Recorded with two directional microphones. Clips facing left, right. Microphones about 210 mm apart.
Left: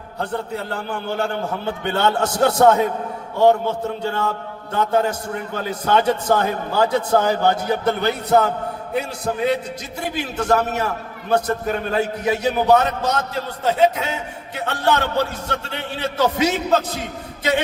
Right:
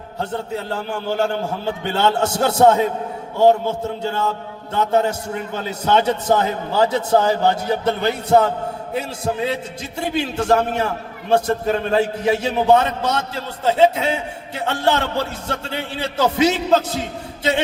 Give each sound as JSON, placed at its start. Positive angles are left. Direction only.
{"t": 0.2, "sound": "a man's voice", "side_deg": -25}